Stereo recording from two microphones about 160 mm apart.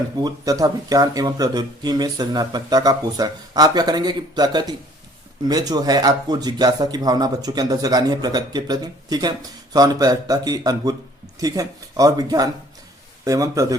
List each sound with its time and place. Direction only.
0.2 s a man's voice: 25° right (ahead or behind)